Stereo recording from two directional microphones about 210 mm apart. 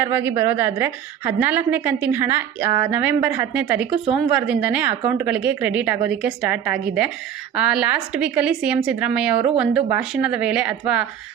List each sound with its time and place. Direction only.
0.0 s a woman's voice: 10° right (ahead or behind)